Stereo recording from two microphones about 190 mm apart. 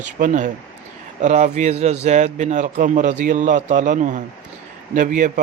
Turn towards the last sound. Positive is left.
turn(degrees=-45)  # may be behind; listen again after turning